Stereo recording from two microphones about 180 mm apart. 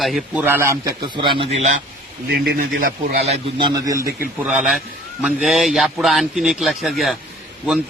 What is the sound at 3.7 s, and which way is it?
Speech, 20° right (ahead or behind).